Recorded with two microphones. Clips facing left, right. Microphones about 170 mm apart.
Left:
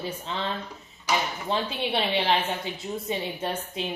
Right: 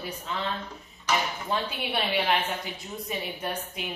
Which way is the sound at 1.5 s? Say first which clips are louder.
Left 3 dB; 25° left (ahead or behind).